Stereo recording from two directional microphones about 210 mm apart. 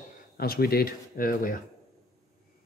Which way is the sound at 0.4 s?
45° left (ahead or behind).